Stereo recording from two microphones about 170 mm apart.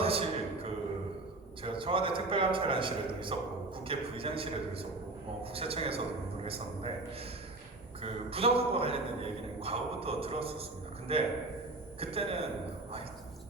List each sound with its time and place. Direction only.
0.0 s a sound: 35° right (ahead or behind)
1.6 s a man's voice: 30° right (ahead or behind)
8.0 s a man's voice: 35° right (ahead or behind)